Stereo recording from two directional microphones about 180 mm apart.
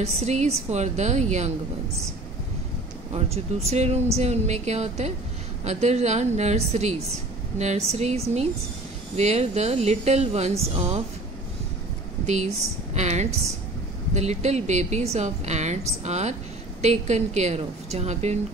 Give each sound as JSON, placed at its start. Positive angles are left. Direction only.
{"t": 0.0, "sound": "speech", "side_deg": -40}
{"t": 3.1, "sound": "speech", "side_deg": -35}
{"t": 12.3, "sound": "speech", "side_deg": -40}